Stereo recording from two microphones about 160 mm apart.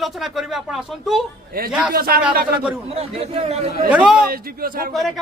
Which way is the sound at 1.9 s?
65° right (ahead or behind).